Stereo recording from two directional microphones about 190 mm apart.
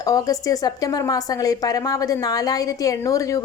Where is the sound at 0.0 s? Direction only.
20° left (ahead or behind).